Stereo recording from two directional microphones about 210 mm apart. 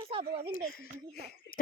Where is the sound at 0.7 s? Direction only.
50° left (ahead or behind).